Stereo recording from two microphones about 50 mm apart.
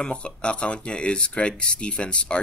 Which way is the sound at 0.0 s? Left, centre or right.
Left.